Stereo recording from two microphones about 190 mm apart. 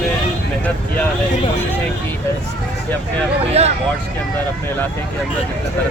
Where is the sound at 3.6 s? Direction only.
35° right (ahead or behind).